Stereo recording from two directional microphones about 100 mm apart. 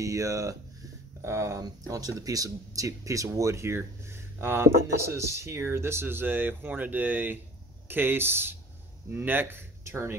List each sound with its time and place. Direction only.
0.0 s speech: 35° right (ahead or behind)